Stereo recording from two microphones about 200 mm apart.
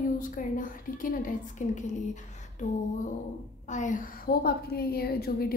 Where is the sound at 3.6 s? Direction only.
40° left (ahead or behind).